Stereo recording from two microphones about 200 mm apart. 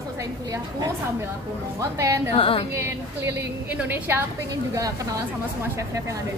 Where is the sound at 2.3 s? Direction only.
25° left (ahead or behind).